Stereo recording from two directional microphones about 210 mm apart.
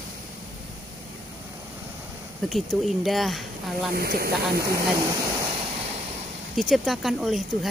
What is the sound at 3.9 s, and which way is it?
Speech, 45° right (ahead or behind).